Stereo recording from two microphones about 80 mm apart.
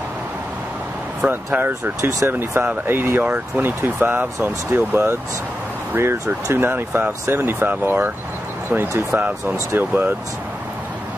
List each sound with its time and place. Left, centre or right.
1.3 s speech: right
6.6 s speech: right
8.7 s speech: right
9.1 s speech: centre